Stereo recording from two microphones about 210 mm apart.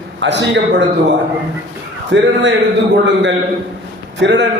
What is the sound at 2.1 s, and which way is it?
Speech, 60° right (ahead or behind).